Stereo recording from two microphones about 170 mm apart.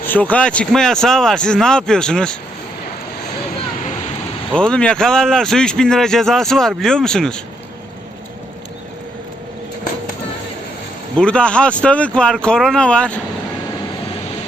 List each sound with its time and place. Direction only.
0.0 s a man's voice: 10° left (ahead or behind)
4.5 s a man's voice: 5° left (ahead or behind)
11.2 s a man's voice: 5° left (ahead or behind)